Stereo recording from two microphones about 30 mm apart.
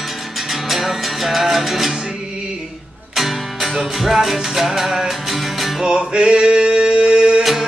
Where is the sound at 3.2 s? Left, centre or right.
Centre.